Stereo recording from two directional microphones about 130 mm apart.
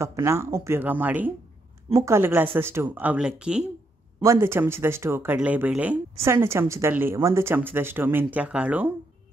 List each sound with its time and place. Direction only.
0.0 s a woman's voice: 20° right (ahead or behind)
4.2 s a woman's voice: 20° right (ahead or behind)